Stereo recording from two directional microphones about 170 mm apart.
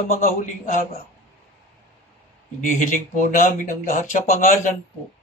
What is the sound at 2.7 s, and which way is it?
Speech, 50° left (ahead or behind).